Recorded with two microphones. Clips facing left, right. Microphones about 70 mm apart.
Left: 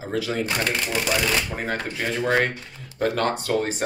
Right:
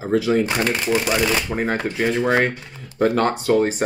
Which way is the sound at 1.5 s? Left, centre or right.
Right.